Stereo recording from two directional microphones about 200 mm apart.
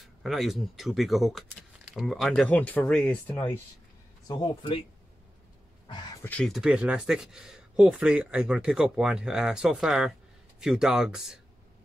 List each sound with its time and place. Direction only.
0.2 s speech: centre (ahead or behind)
4.3 s speech: 25° left (ahead or behind)
6.2 s speech: 5° left (ahead or behind)